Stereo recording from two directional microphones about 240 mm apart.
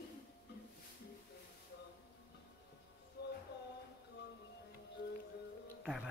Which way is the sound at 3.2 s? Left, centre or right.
Left.